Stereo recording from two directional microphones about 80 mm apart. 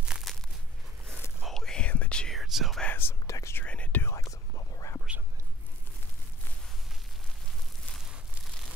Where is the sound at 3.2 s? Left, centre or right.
Left.